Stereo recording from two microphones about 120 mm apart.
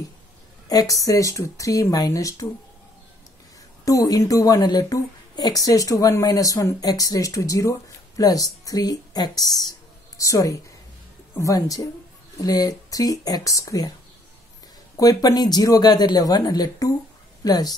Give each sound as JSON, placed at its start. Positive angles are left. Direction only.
{"t": 0.7, "sound": "a woman's voice", "side_deg": 30}
{"t": 3.8, "sound": "a woman's voice", "side_deg": 30}
{"t": 15.0, "sound": "speech", "side_deg": 30}